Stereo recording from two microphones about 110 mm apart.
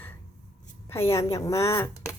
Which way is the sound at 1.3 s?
30° left (ahead or behind).